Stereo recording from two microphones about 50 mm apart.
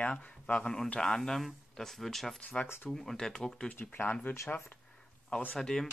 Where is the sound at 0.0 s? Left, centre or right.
Centre.